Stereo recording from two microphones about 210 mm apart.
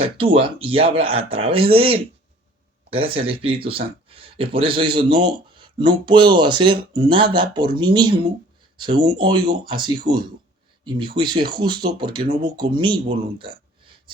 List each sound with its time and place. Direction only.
0.2 s speech: 25° right (ahead or behind)